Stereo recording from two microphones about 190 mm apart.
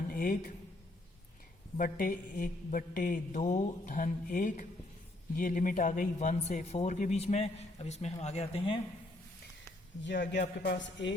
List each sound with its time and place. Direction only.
0.1 s speech: 45° left (ahead or behind)
1.8 s speech: 45° left (ahead or behind); by 8.8 s 30° left (ahead or behind)
10.0 s a man's voice: 70° left (ahead or behind)